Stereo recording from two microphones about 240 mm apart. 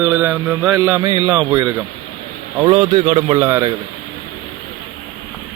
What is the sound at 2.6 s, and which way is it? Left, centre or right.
Speech, centre.